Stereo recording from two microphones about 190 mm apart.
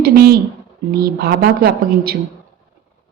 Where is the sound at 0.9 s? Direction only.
55° right (ahead or behind).